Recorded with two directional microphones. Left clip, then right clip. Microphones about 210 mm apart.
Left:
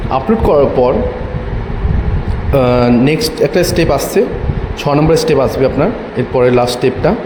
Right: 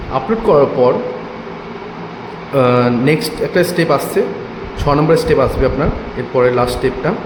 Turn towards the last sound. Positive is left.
turn(degrees=20)  # may be behind; listen again after turning